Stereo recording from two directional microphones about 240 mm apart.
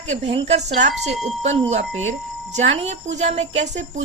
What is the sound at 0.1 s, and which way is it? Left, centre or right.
Speech, right.